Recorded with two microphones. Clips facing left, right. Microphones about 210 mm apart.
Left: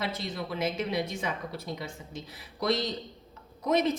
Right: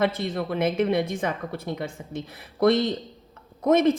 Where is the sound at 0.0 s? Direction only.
55° right (ahead or behind).